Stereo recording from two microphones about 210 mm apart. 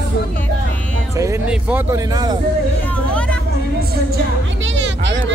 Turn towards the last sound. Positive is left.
turn(degrees=-60)  # may be behind; listen again after turning